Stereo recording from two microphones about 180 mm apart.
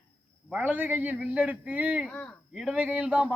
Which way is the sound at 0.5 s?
10° right (ahead or behind).